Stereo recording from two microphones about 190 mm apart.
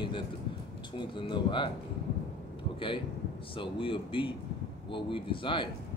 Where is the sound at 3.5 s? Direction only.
25° left (ahead or behind).